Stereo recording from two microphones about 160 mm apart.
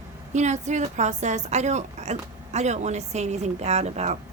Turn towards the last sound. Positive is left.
turn(degrees=-45)  # may be behind; listen again after turning